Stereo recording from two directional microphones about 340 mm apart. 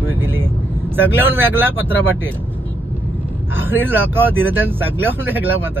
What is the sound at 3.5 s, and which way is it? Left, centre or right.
Speech, centre.